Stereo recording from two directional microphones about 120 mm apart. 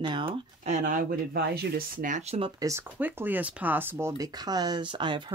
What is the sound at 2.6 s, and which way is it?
Speech, 30° right (ahead or behind).